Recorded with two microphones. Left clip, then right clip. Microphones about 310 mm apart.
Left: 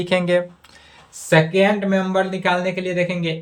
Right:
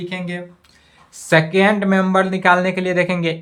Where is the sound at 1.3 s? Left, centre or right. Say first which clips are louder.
Right 1 dB; centre.